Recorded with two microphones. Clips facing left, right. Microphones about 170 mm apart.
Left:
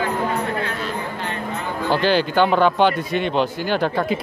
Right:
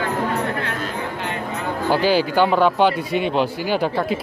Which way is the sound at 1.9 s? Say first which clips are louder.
Right 1 dB; 5° right (ahead or behind).